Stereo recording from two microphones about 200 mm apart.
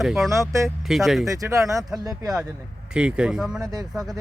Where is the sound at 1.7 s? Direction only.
15° right (ahead or behind).